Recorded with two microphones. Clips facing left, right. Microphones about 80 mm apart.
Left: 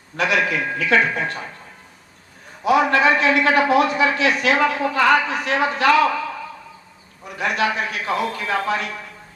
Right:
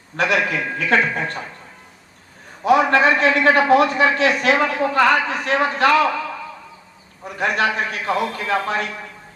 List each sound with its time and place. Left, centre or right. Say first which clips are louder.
0.2 s a man's voice: even; right
2.6 s a man's voice: right 1 dB; right
7.3 s a man's voice: right 1 dB; right